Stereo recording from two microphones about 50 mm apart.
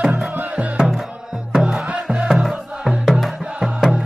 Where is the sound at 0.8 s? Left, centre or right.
Centre.